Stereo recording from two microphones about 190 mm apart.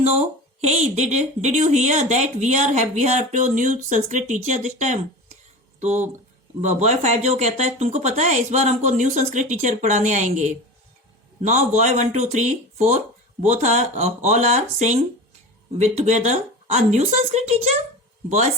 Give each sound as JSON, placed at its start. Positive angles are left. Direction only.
{"t": 0.0, "sound": "speech", "side_deg": -35}